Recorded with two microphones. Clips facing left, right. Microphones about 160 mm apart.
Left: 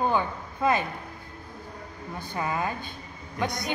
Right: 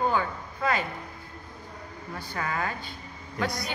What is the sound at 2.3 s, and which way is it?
A woman's voice, 20° left (ahead or behind).